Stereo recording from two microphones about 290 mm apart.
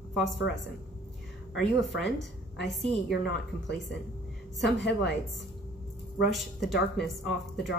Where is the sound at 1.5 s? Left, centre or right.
Centre.